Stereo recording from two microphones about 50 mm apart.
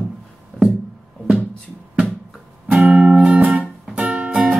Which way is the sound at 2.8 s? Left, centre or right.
Right.